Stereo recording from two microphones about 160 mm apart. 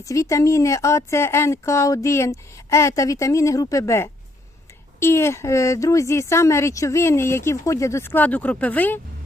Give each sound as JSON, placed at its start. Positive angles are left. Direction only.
{"t": 0.0, "sound": "speech", "side_deg": 20}